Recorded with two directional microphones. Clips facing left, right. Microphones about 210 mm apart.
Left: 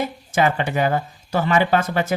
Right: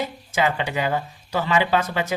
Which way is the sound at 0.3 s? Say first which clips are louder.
Left 3 dB; 50° left (ahead or behind).